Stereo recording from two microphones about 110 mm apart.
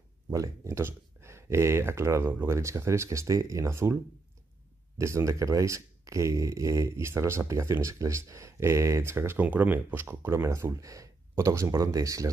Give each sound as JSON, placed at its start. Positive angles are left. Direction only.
{"t": 0.3, "sound": "speech", "side_deg": -25}